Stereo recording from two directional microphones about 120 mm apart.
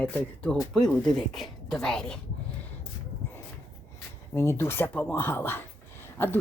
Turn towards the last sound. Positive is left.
turn(degrees=20)  # may be behind; listen again after turning